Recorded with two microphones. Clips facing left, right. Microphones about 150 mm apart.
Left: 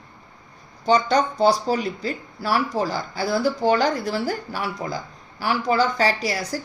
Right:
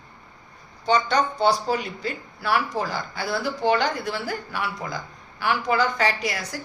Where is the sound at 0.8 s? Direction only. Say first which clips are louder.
Left 3 dB; 40° left (ahead or behind).